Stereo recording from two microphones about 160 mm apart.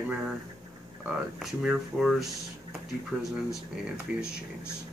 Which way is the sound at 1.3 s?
Centre (ahead or behind).